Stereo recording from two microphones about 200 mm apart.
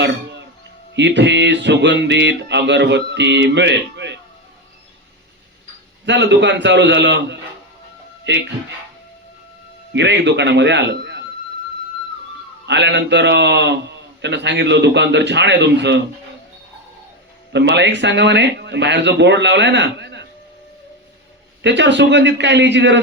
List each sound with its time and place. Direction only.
0.9 s music: 60° right (ahead or behind)
6.1 s music: 60° right (ahead or behind)
9.9 s music: 60° right (ahead or behind)
12.6 s music: 60° right (ahead or behind)
17.5 s music: 60° right (ahead or behind)
21.6 s music: 60° right (ahead or behind)